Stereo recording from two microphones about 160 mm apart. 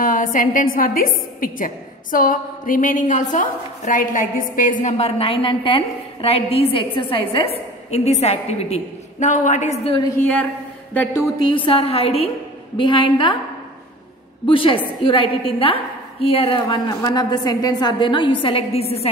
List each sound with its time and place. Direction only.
0.0 s a woman's voice: 60° left (ahead or behind)
10.1 s speech: 10° left (ahead or behind)
11.4 s a woman's voice: 35° left (ahead or behind)
14.4 s a woman's voice: 35° left (ahead or behind)
16.6 s a woman's voice: 25° left (ahead or behind)